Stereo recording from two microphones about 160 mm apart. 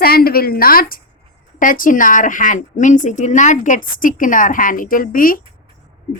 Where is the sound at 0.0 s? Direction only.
70° left (ahead or behind).